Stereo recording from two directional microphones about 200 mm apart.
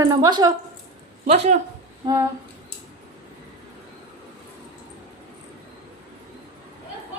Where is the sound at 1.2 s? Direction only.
30° right (ahead or behind).